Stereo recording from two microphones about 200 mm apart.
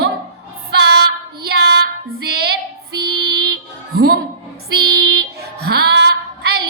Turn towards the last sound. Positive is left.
turn(degrees=-55)  # may be behind; listen again after turning